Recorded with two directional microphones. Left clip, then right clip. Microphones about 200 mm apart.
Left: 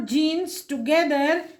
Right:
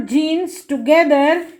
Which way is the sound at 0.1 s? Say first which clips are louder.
Right 5 dB; 15° right (ahead or behind).